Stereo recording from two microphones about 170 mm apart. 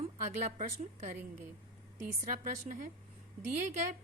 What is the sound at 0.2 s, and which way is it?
A woman's voice, 40° right (ahead or behind).